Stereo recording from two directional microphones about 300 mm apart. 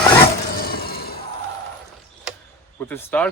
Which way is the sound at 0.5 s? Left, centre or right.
Left.